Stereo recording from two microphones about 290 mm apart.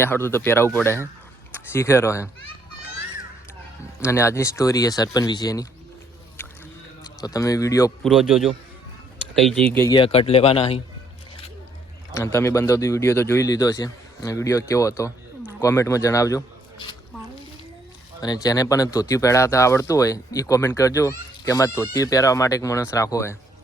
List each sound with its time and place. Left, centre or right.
0.0 s speech: centre
4.0 s speech: centre
7.0 s a man's voice: centre
8.0 s a man's voice: centre
9.6 s speech: centre
12.1 s speech: centre
18.4 s speech: centre